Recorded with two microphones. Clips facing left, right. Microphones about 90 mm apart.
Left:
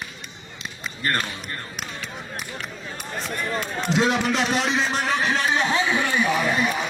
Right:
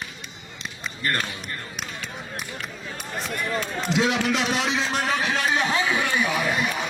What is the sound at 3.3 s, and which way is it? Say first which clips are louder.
A man's voice: even; 35° left (ahead or behind).